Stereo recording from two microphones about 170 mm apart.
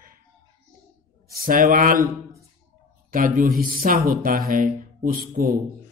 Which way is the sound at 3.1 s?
55° right (ahead or behind).